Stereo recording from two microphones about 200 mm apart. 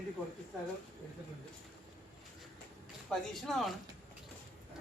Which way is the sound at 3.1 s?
Centre (ahead or behind).